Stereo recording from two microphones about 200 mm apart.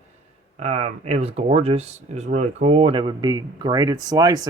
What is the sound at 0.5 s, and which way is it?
Speech, 35° right (ahead or behind).